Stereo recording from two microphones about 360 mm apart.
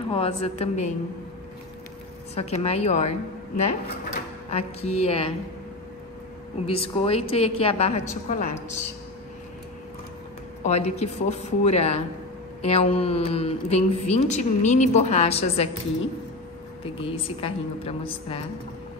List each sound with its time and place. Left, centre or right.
0.1 s speech: centre
2.3 s speech: centre
6.6 s speech: centre
10.6 s speech: centre
16.8 s speech: centre